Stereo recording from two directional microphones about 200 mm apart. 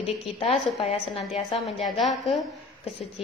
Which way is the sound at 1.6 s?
Centre (ahead or behind).